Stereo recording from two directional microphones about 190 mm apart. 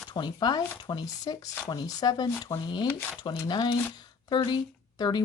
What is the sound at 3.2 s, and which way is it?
Speech, 20° left (ahead or behind).